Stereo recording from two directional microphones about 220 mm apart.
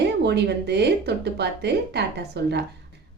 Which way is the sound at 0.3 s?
50° right (ahead or behind).